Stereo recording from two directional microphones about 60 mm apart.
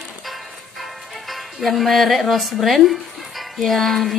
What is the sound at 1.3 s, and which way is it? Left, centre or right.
A woman's voice, centre.